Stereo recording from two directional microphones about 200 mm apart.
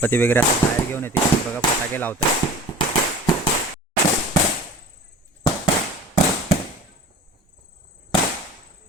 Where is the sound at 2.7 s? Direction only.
20° left (ahead or behind).